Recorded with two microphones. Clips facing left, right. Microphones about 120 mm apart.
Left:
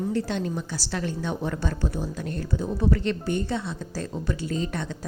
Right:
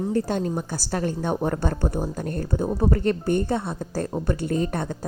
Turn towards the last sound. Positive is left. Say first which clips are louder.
# right 4 dB
turn(degrees=-50)  # may be behind; listen again after turning